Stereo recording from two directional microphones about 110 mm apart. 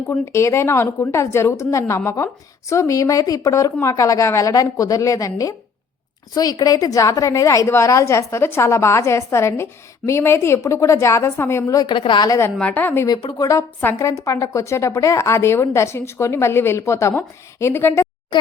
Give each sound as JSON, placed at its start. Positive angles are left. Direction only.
{"t": 0.1, "sound": "a woman's voice", "side_deg": 25}
{"t": 11.7, "sound": "a woman's voice", "side_deg": 40}
{"t": 12.5, "sound": "a woman's voice", "side_deg": 15}
{"t": 13.4, "sound": "a woman's voice", "side_deg": 30}